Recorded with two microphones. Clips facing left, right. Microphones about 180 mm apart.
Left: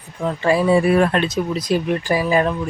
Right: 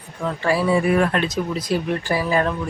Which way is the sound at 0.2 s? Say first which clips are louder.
Left 3 dB; 20° left (ahead or behind).